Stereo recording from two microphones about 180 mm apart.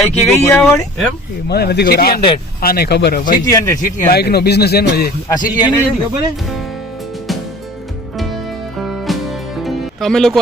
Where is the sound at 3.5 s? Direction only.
20° left (ahead or behind).